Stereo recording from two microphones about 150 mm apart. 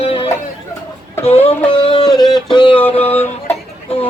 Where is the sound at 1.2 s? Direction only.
40° left (ahead or behind).